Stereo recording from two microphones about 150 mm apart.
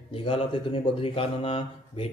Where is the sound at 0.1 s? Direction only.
40° left (ahead or behind).